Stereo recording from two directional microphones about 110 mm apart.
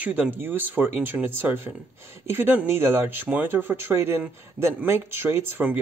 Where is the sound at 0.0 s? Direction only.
15° right (ahead or behind).